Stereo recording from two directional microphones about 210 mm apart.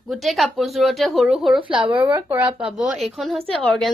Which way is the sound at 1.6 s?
25° right (ahead or behind).